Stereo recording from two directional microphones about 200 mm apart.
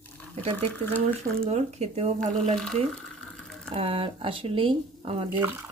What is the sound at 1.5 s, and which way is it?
Speech, 35° right (ahead or behind).